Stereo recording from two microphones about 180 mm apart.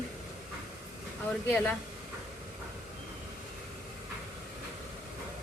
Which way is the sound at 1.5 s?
10° left (ahead or behind).